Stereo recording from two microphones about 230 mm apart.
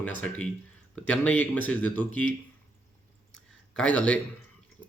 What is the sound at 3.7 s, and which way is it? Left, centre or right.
Speech, centre.